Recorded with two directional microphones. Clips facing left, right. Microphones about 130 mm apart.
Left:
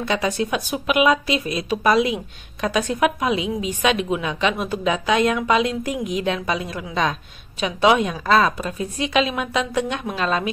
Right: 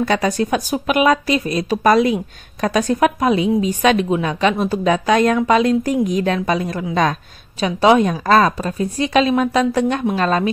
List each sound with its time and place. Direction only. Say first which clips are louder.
0.0 s a woman's voice: right 4 dB; 45° right (ahead or behind)